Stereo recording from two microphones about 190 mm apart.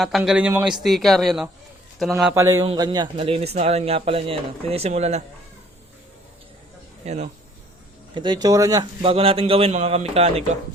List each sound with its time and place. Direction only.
0.0 s a man's voice: centre (ahead or behind)
2.3 s a man's voice: 15° right (ahead or behind); by 5.2 s 35° right (ahead or behind)
7.0 s speech: 35° right (ahead or behind)
8.1 s a man's voice: 25° right (ahead or behind)